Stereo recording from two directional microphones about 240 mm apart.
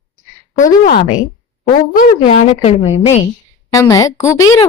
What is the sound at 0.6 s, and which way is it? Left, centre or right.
A woman's voice, left.